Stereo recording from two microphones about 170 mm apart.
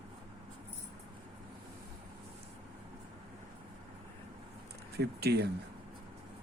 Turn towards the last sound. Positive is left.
turn(degrees=-70)  # may be behind; listen again after turning